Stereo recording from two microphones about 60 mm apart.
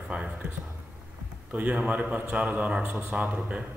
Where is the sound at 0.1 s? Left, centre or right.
Right.